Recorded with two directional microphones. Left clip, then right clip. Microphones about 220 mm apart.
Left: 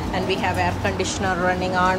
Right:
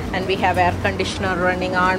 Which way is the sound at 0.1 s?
5° left (ahead or behind).